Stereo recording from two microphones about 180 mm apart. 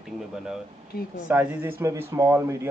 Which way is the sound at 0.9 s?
55° left (ahead or behind).